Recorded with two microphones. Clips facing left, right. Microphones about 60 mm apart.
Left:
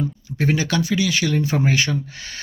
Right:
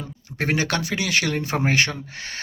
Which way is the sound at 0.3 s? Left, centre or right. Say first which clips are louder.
Left 2 dB; right.